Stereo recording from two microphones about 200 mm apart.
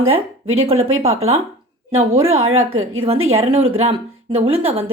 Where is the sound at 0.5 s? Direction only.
30° right (ahead or behind).